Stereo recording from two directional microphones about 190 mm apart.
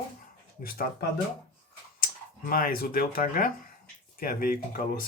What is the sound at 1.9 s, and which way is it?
Speech, 50° left (ahead or behind).